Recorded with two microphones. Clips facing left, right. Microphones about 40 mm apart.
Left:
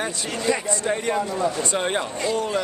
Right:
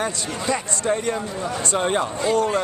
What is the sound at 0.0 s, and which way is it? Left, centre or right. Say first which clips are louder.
Speech: even; centre.